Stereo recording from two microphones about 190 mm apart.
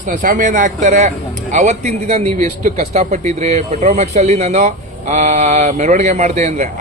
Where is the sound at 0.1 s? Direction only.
45° right (ahead or behind).